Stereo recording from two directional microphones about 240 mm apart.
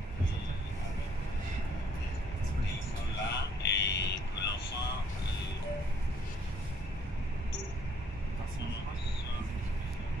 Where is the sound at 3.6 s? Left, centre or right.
Left.